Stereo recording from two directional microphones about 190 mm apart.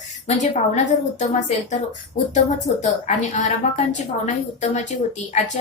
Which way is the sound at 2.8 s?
35° left (ahead or behind).